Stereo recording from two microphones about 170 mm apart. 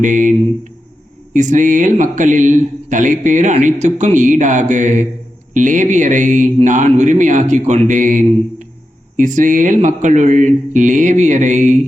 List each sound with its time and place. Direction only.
0.0 s speech: 50° right (ahead or behind)